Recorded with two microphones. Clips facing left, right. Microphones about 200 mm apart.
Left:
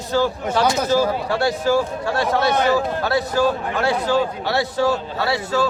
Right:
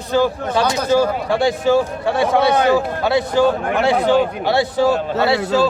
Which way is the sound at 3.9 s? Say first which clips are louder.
Right 6 dB; 60° right (ahead or behind).